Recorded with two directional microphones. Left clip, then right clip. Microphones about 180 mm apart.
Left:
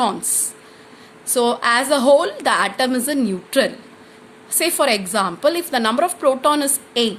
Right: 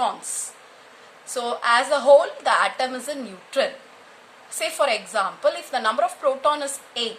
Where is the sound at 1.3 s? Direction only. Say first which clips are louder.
Left 4 dB; 35° left (ahead or behind).